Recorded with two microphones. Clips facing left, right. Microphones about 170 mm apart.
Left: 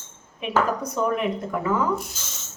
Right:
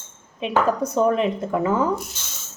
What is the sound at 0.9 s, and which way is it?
Speech, 25° right (ahead or behind).